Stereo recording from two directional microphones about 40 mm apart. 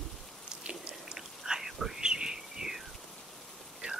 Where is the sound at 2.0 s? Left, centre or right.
Centre.